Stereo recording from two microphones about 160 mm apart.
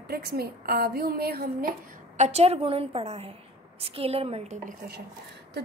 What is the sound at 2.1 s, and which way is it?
A woman's voice, 45° right (ahead or behind).